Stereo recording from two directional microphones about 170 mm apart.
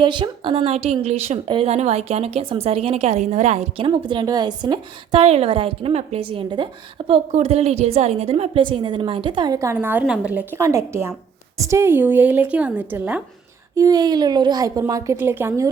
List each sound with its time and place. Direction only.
0.0 s a woman's voice: 30° right (ahead or behind); by 13.2 s 10° right (ahead or behind)
13.7 s a woman's voice: 20° right (ahead or behind)